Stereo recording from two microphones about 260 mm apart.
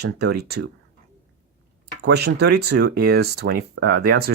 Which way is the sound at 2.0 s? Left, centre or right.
Right.